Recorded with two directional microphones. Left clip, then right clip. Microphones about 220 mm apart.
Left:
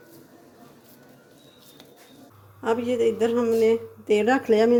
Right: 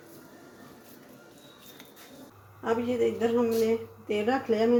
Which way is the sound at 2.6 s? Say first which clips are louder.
Left 4 dB; 50° left (ahead or behind).